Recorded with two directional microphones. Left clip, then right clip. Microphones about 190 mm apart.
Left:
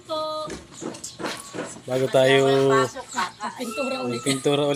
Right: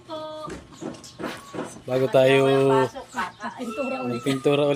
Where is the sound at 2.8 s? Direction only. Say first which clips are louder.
Left 1 dB; 35° right (ahead or behind).